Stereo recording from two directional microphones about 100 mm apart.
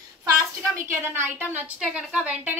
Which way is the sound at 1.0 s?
20° right (ahead or behind).